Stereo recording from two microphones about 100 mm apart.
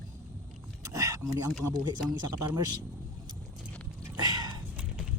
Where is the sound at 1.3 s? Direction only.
35° right (ahead or behind).